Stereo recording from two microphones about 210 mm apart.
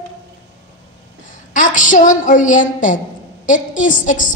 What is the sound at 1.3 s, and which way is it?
A woman's voice, 40° left (ahead or behind).